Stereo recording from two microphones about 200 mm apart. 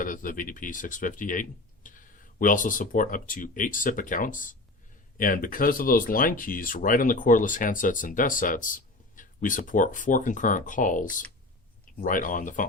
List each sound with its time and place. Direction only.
0.0 s speech: 45° left (ahead or behind)